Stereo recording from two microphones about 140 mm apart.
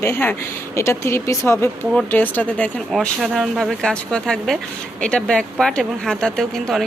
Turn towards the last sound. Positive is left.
turn(degrees=5)  # may be behind; listen again after turning